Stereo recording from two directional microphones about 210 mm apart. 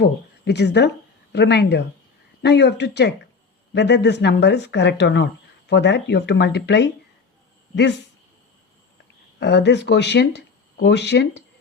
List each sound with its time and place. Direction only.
0.0 s speech: 50° left (ahead or behind)
9.4 s speech: 55° left (ahead or behind)